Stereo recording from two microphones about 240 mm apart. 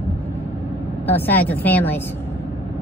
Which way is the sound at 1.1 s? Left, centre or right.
Centre.